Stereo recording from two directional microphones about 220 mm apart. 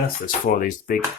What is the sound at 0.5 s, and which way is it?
Speech, 35° left (ahead or behind).